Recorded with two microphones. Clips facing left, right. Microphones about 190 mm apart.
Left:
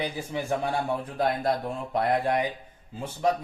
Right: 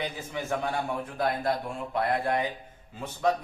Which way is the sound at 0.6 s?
35° left (ahead or behind).